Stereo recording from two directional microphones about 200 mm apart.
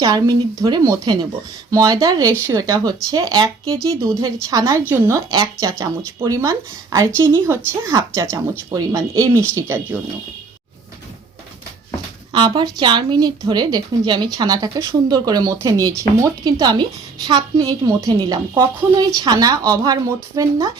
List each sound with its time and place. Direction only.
0.0 s a woman's voice: 20° right (ahead or behind)
12.3 s a woman's voice: 20° right (ahead or behind)